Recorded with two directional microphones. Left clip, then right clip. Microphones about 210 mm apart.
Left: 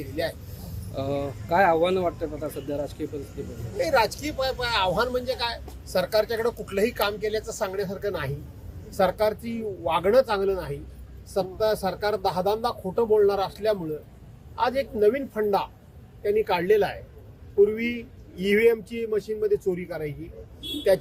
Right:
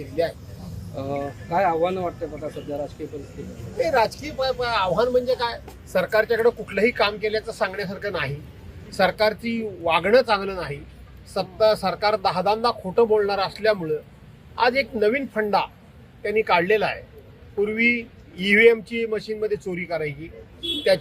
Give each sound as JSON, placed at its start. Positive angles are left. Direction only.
{"t": 0.9, "sound": "speech", "side_deg": 40}
{"t": 3.8, "sound": "speech", "side_deg": 10}